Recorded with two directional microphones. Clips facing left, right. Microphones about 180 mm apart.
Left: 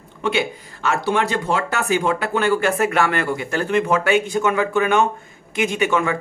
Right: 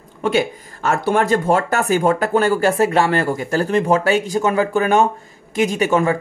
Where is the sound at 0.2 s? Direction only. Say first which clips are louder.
Right 3 dB; 45° right (ahead or behind).